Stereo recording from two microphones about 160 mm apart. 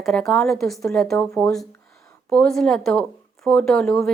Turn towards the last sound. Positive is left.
turn(degrees=5)  # may be behind; listen again after turning